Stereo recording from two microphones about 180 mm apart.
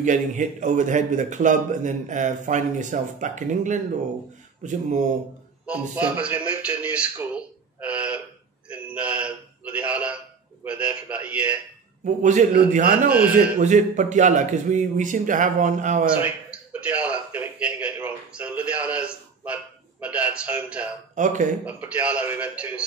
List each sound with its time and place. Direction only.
0.0 s a man's voice: 45° right (ahead or behind)
5.7 s a man's voice: 5° right (ahead or behind)
8.6 s a sound: 5° right (ahead or behind)
10.6 s a man's voice: 10° right (ahead or behind)
12.0 s a man's voice: 45° right (ahead or behind)
16.2 s a man's voice: 5° right (ahead or behind)
21.1 s speech: 45° right (ahead or behind)
21.6 s a man's voice: 5° right (ahead or behind)